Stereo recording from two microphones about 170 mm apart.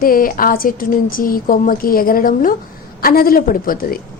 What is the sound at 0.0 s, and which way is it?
A woman's voice, 55° left (ahead or behind).